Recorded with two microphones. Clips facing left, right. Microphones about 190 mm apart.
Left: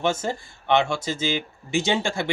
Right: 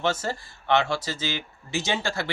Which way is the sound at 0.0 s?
15° left (ahead or behind).